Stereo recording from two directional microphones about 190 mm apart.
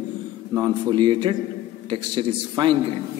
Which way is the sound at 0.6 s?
25° right (ahead or behind).